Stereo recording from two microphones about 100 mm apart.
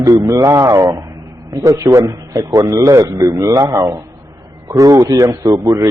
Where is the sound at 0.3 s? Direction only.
35° right (ahead or behind).